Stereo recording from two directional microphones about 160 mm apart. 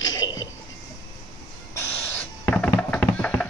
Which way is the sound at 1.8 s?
10° left (ahead or behind).